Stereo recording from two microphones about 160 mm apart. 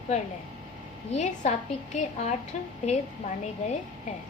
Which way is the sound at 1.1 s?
45° left (ahead or behind).